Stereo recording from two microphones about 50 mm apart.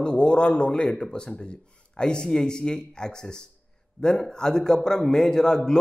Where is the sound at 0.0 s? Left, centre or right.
Centre.